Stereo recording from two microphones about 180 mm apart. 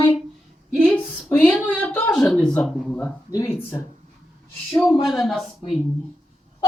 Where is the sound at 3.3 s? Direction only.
20° left (ahead or behind).